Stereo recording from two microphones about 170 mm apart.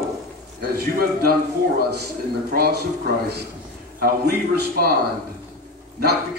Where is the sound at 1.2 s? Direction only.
65° right (ahead or behind).